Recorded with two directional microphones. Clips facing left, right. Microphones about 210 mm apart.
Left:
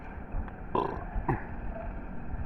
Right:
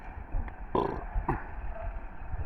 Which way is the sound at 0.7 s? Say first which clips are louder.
Right 2 dB; 15° right (ahead or behind).